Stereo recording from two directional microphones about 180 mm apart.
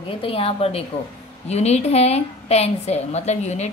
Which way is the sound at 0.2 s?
30° left (ahead or behind).